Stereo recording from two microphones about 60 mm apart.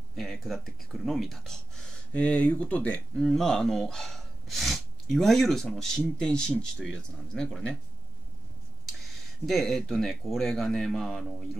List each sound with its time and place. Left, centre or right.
0.1 s speech: centre
2.1 s speech: centre
3.2 s speech: centre
9.5 s speech: centre